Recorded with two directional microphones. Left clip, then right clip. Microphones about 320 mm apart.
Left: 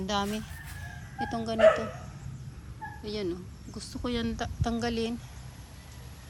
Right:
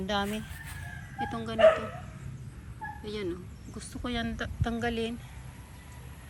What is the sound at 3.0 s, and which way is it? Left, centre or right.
Speech, centre.